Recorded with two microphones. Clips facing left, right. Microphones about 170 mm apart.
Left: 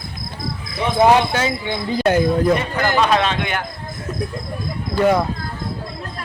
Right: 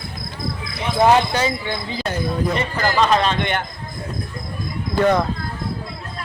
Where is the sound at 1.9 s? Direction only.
50° left (ahead or behind).